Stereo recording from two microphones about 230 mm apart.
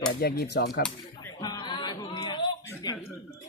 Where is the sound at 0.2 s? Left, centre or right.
Left.